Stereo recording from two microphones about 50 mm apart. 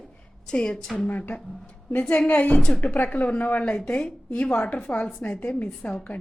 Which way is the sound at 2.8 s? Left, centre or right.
Left.